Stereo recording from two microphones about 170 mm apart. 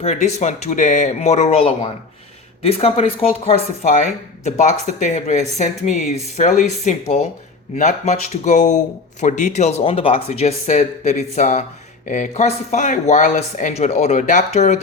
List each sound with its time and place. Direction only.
0.0 s speech: 40° left (ahead or behind)